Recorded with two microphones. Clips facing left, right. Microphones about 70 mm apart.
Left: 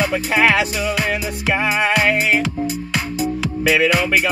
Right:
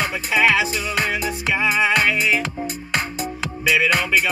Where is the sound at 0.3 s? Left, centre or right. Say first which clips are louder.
Even; left.